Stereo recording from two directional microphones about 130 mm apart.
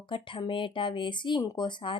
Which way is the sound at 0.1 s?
40° left (ahead or behind).